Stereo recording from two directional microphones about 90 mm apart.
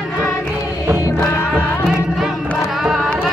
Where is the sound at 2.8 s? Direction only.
Centre (ahead or behind).